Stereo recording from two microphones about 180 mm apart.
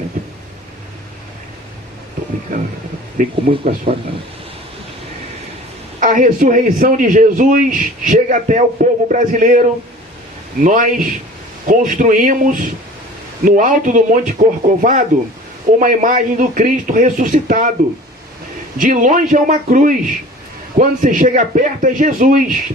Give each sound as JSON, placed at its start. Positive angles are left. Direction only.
{"t": 2.5, "sound": "a man's voice", "side_deg": -45}
{"t": 3.5, "sound": "speech", "side_deg": -30}
{"t": 3.9, "sound": "a man's voice", "side_deg": -45}
{"t": 6.0, "sound": "a man's voice", "side_deg": -45}
{"t": 18.8, "sound": "a man's voice", "side_deg": -50}